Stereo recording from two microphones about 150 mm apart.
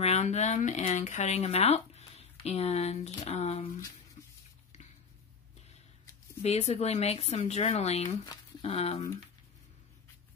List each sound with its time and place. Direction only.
0.0 s speech: 45° left (ahead or behind)
6.4 s speech: 45° left (ahead or behind)